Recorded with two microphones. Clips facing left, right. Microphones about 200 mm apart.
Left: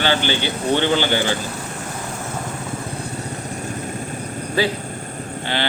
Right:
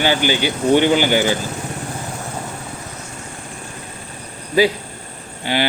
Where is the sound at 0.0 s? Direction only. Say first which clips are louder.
Right 3 dB; 15° right (ahead or behind).